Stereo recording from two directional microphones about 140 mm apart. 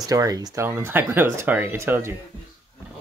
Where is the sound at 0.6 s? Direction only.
15° right (ahead or behind).